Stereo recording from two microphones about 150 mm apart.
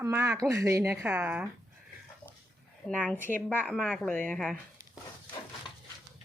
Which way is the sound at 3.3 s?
15° left (ahead or behind).